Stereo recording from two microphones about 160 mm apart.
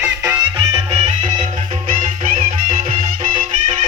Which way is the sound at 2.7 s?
40° right (ahead or behind).